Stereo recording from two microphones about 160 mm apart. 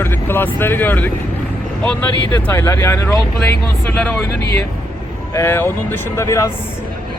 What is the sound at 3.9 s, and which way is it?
Speech, 5° left (ahead or behind).